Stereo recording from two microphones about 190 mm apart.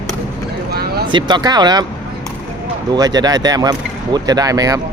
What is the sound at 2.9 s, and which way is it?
Speech, 20° right (ahead or behind).